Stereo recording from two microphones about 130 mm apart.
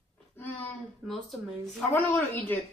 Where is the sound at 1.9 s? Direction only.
15° left (ahead or behind).